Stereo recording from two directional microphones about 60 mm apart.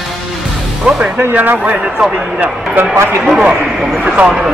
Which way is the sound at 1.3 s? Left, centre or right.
Right.